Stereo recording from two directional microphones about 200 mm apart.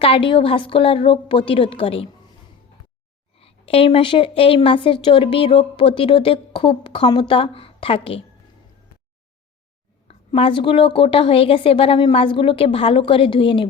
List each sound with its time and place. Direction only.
0.0 s a woman's voice: 25° left (ahead or behind)
3.3 s a woman's voice: 30° left (ahead or behind)
10.1 s a woman's voice: 30° left (ahead or behind)